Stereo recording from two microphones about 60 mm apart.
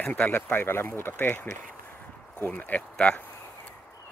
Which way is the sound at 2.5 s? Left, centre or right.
Left.